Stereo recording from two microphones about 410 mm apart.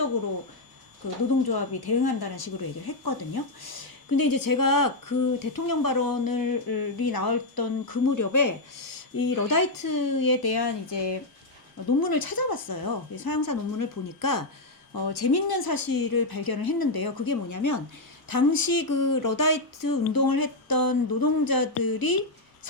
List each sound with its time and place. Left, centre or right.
1.5 s a woman's voice: left
11.9 s a woman's voice: left
14.9 s a woman's voice: left
18.3 s a woman's voice: left